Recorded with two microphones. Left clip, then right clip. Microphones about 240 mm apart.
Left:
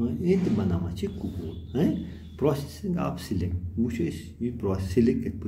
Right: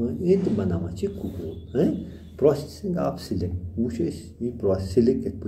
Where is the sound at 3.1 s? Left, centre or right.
Left.